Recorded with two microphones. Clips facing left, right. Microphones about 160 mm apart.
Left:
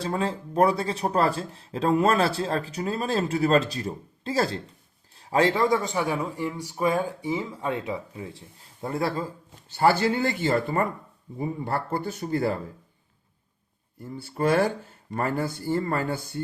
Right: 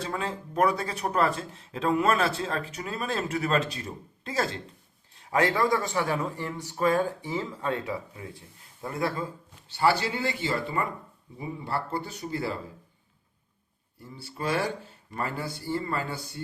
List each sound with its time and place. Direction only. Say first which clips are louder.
0.0 s speech: left 5 dB; 35° left (ahead or behind); by 7.9 s 15° left (ahead or behind)
8.1 s speech: left 4 dB; 25° left (ahead or behind)
9.6 s speech: left 4 dB; 45° left (ahead or behind)
14.2 s speech: left 7 dB; 50° left (ahead or behind)